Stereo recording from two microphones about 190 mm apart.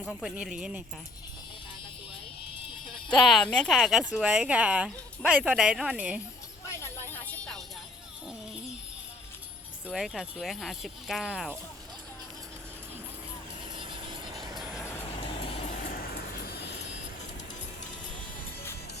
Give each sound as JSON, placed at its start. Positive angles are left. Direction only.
{"t": 0.0, "sound": "speech", "side_deg": 0}
{"t": 3.1, "sound": "speech", "side_deg": 5}
{"t": 6.7, "sound": "a sound", "side_deg": 15}
{"t": 9.8, "sound": "speech", "side_deg": 0}
{"t": 13.7, "sound": "vehicle", "side_deg": -25}
{"t": 15.8, "sound": "a sound", "side_deg": 50}